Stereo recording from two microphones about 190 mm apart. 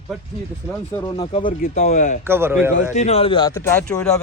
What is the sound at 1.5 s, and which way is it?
Speech, 50° left (ahead or behind).